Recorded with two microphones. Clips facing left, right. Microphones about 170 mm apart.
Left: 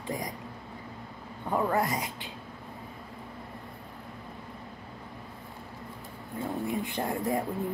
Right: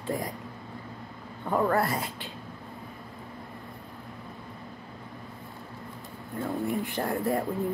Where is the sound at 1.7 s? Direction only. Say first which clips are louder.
Right 2 dB; 15° left (ahead or behind).